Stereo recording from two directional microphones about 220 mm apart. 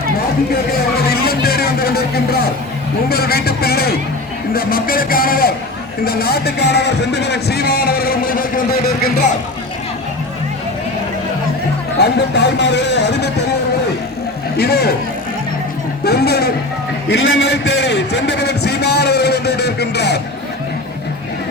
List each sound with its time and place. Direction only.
1.1 s music: 45° left (ahead or behind)
3.1 s speech: 45° left (ahead or behind)
12.1 s speech: 50° left (ahead or behind)
14.6 s speech: 45° left (ahead or behind)
16.0 s speech: 45° left (ahead or behind)